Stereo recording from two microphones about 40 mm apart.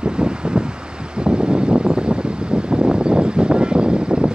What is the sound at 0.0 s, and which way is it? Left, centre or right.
Wind noise, right.